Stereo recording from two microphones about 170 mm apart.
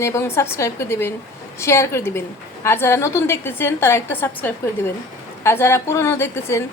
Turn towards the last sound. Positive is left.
turn(degrees=15)  # may be behind; listen again after turning